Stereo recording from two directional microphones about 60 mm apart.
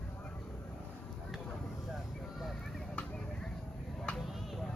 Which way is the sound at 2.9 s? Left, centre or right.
Centre.